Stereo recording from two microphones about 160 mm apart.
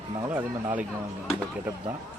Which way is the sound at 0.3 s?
10° right (ahead or behind).